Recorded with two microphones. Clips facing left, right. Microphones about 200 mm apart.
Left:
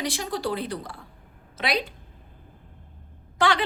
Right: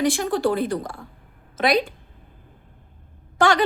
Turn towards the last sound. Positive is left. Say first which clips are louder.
# right 4 dB
turn(degrees=-45)  # may be behind; listen again after turning